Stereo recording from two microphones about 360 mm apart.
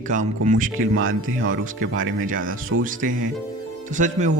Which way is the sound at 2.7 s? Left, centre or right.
Right.